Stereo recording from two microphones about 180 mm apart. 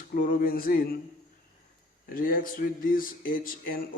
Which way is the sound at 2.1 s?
50° left (ahead or behind).